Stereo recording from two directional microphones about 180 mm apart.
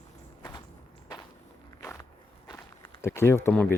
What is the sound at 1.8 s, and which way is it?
Walk, 15° left (ahead or behind).